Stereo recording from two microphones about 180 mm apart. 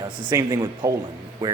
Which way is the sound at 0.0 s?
25° right (ahead or behind).